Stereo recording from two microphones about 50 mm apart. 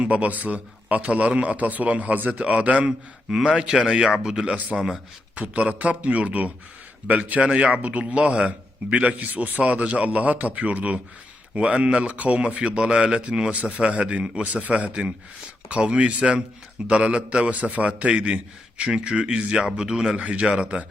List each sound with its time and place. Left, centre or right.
0.0 s a man's voice: right
5.3 s a man's voice: right
20.1 s a man's voice: right